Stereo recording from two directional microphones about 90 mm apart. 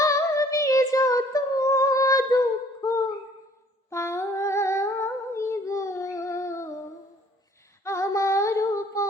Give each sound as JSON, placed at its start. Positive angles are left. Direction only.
{"t": 0.0, "sound": "a sound", "side_deg": 35}
{"t": 3.8, "sound": "humming", "side_deg": 30}
{"t": 7.9, "sound": "music", "side_deg": 35}